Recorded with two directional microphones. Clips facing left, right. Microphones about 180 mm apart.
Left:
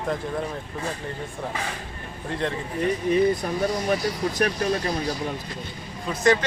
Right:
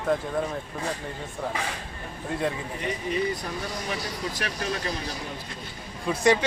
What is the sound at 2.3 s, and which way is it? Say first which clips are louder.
Speech: even; 5° right (ahead or behind).